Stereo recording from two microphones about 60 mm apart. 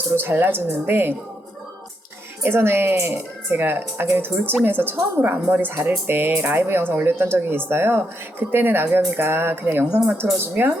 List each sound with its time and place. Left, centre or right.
0.2 s speech: right
2.4 s speech: right